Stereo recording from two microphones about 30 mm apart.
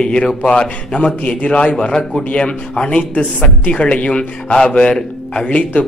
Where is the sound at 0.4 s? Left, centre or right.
Left.